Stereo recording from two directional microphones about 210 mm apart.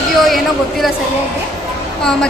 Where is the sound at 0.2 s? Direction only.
Centre (ahead or behind).